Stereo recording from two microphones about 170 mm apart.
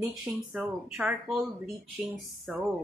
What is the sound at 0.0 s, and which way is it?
Speech, centre (ahead or behind).